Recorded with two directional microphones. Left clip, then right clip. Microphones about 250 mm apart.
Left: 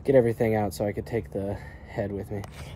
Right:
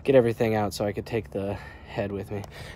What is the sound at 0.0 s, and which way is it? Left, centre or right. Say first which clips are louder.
A woman's voice: right 1 dB; centre.